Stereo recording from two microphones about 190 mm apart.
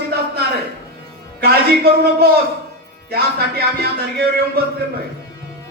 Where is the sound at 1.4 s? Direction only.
55° right (ahead or behind).